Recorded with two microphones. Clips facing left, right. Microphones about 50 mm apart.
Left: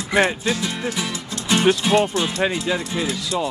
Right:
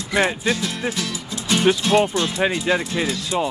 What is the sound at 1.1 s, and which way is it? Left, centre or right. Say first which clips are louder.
Music: even; centre.